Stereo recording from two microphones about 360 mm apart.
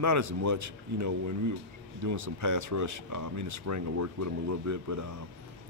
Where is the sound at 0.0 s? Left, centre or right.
Right.